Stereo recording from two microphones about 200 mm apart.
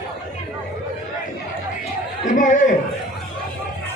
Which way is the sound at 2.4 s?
40° left (ahead or behind).